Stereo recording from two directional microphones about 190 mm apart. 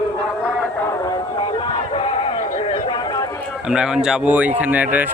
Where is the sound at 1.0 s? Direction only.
25° left (ahead or behind).